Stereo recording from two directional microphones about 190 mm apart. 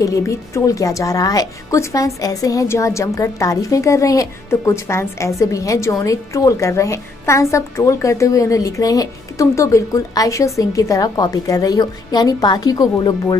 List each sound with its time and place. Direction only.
0.0 s a woman's voice: 15° left (ahead or behind)